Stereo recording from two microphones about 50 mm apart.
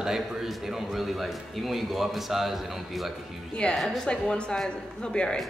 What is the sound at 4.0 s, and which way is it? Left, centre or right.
A man's voice, centre.